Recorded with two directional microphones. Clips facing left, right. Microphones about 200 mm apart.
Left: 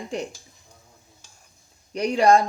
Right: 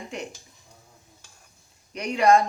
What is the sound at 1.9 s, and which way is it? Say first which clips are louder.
Speech: left 2 dB; 35° left (ahead or behind).